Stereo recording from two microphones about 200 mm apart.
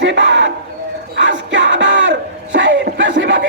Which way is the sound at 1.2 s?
65° right (ahead or behind).